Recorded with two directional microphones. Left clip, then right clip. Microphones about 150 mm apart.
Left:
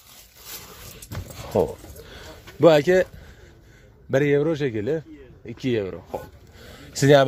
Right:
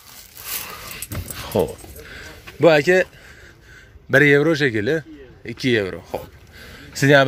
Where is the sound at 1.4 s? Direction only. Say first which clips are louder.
Right 1 dB; centre (ahead or behind).